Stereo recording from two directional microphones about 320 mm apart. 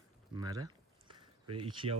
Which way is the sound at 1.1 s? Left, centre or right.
Centre.